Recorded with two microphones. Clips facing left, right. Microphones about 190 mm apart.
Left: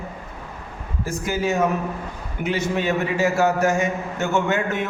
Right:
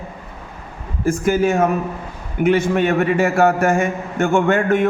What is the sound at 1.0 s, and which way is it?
A man's voice, 50° right (ahead or behind).